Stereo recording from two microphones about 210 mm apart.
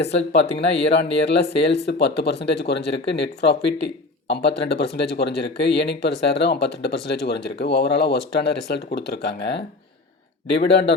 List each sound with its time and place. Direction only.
0.7 s speech: 55° left (ahead or behind)